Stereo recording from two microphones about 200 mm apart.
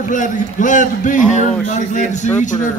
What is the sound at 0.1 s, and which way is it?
A man's voice, 40° left (ahead or behind).